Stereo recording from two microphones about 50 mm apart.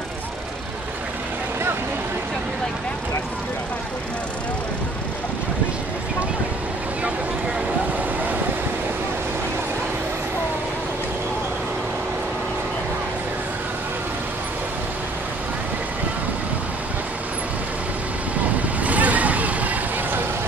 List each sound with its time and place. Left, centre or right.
18.4 s vehicle: right